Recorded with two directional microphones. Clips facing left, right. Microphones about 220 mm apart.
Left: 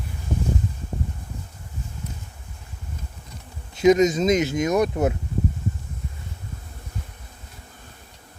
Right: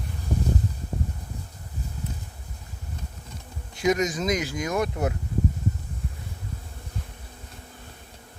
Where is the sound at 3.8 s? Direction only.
25° left (ahead or behind).